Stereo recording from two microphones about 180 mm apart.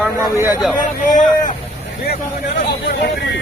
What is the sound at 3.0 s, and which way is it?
Speech, 75° left (ahead or behind).